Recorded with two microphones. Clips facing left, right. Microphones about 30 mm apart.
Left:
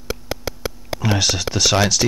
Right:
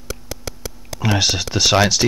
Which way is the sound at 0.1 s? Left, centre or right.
Left.